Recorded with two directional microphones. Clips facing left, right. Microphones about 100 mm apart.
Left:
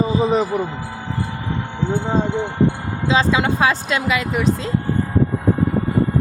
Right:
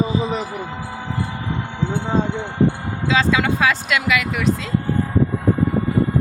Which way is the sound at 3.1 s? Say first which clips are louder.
Left 1 dB; 30° left (ahead or behind).